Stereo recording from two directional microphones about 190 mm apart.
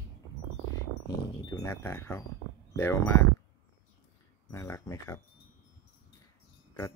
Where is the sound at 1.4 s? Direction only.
20° left (ahead or behind).